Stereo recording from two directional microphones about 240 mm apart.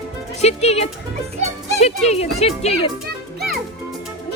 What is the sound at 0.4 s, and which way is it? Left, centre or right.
Speech, left.